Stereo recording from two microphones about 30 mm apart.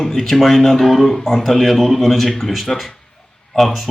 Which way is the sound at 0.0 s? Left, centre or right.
Centre.